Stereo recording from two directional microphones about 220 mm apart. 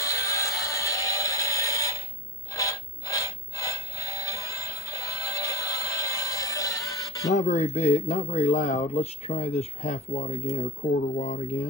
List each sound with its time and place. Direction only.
0.0 s music: 15° left (ahead or behind)
7.3 s speech: 35° left (ahead or behind)